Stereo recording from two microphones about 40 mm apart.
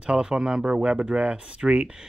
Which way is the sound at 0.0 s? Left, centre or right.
Right.